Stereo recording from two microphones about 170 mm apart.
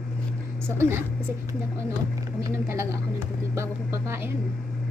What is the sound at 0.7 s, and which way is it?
Speech, 15° right (ahead or behind).